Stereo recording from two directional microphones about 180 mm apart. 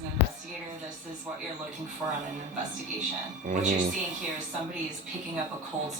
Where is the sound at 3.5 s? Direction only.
45° right (ahead or behind).